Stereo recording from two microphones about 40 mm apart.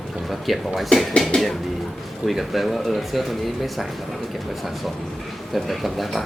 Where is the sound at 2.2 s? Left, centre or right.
Centre.